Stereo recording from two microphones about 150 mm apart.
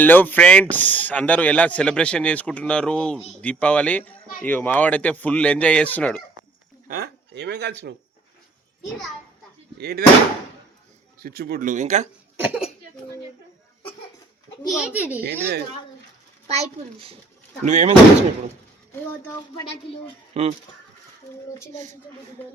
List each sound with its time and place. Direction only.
0.0 s speech: 10° left (ahead or behind)
6.8 s speech: 85° right
9.7 s speech: 90° right
11.2 s speech: 90° right; by 12.0 s 50° right (ahead or behind)
12.4 s a child's voice: 10° right (ahead or behind)
14.7 s a child's voice: 5° right (ahead or behind)
15.2 s speech: 90° right
16.5 s a child's voice: 40° right (ahead or behind)
17.7 s a child's voice: 55° right (ahead or behind)
18.9 s speech: 20° left (ahead or behind)
20.3 s speech: 45° right (ahead or behind)